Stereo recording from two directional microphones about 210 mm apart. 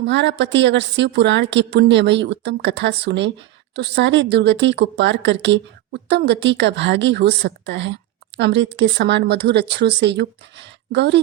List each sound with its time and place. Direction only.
0.0 s speech: 55° right (ahead or behind)